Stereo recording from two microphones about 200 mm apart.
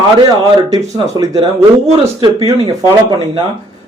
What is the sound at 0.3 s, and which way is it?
Speech, 20° right (ahead or behind).